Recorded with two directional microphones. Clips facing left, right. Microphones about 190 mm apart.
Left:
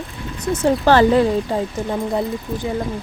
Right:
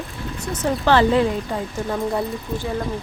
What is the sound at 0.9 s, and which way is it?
Speech, 40° left (ahead or behind).